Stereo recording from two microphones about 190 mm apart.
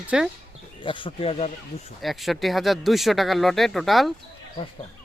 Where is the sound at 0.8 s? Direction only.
25° left (ahead or behind).